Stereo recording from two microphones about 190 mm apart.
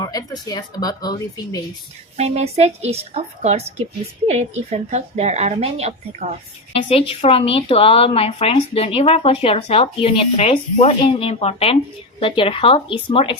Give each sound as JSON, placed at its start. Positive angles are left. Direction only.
{"t": 0.0, "sound": "speech", "side_deg": 20}
{"t": 2.1, "sound": "speech", "side_deg": -35}
{"t": 6.8, "sound": "speech", "side_deg": 30}